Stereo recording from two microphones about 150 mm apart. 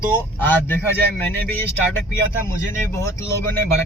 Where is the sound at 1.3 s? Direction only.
15° left (ahead or behind).